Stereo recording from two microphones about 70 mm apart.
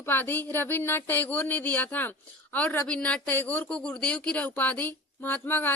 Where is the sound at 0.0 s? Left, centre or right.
Left.